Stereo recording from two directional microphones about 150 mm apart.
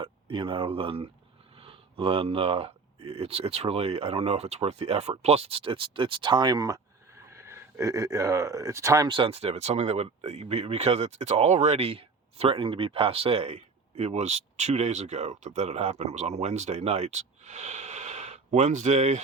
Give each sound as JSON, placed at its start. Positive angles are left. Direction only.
{"t": 0.0, "sound": "speech", "side_deg": -35}
{"t": 9.0, "sound": "speech", "side_deg": -35}